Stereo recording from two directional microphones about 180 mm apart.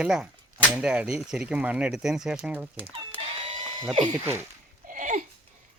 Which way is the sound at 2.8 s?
30° right (ahead or behind).